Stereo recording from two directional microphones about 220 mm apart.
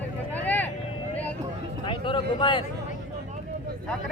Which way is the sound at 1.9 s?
20° left (ahead or behind).